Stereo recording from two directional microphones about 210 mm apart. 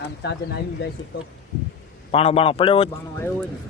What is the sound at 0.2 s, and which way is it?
Speech, 50° left (ahead or behind).